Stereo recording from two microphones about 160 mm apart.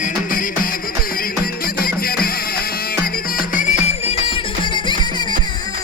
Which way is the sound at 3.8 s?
35° left (ahead or behind).